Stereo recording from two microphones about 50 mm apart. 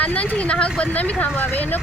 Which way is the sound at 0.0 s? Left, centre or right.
Left.